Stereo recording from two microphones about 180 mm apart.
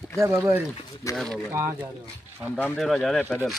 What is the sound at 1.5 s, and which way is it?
Speech, 15° right (ahead or behind).